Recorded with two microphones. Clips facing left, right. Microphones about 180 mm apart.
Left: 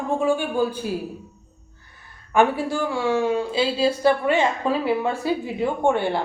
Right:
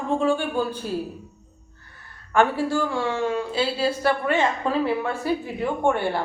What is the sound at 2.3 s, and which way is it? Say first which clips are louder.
A woman's voice: left 1 dB; 15° left (ahead or behind).